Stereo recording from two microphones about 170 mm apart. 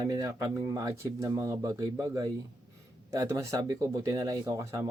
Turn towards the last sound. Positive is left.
turn(degrees=-20)  # may be behind; listen again after turning